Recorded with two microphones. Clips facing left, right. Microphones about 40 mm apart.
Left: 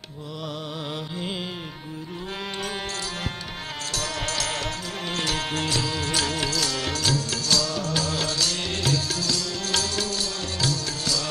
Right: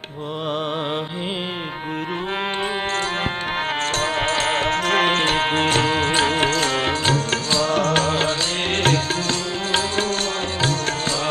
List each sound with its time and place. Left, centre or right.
4.0 s music: right
4.8 s music: right
9.7 s music: right